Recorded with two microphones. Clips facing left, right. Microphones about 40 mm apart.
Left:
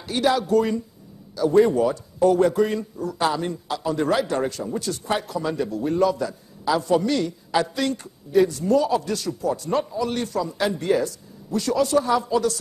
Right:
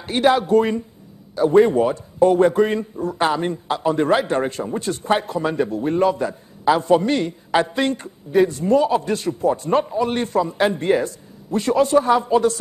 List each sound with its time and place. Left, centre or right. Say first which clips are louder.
0.0 s a man's voice: right 4 dB; right